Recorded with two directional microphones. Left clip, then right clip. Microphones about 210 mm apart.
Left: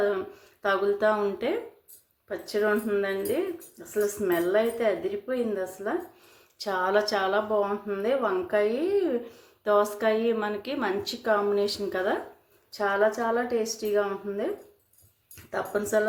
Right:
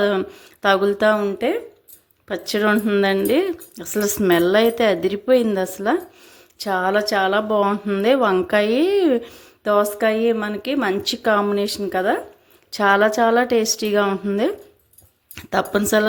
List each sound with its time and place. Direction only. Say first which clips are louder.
0.0 s a woman's voice: right 7 dB; 45° right (ahead or behind)
6.6 s a woman's voice: right 6 dB; 35° right (ahead or behind)